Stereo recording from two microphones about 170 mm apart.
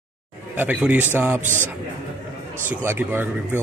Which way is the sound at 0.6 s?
10° right (ahead or behind).